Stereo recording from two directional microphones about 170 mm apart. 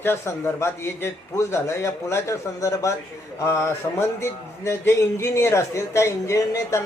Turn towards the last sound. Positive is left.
turn(degrees=15)  # may be behind; listen again after turning